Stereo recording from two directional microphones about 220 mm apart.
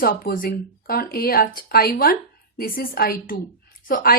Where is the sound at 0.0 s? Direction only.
40° left (ahead or behind).